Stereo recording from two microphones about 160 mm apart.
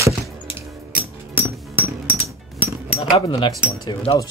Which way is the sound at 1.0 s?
10° right (ahead or behind).